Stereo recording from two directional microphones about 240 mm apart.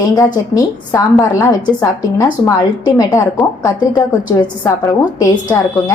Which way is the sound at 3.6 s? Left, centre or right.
Centre.